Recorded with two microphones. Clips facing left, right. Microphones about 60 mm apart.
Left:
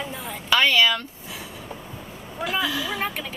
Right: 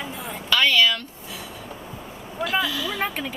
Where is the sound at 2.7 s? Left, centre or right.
Centre.